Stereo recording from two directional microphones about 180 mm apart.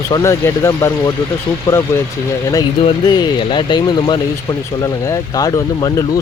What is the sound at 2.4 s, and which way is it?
Speech, 20° left (ahead or behind).